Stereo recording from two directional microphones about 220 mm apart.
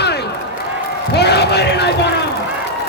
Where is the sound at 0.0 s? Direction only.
50° left (ahead or behind).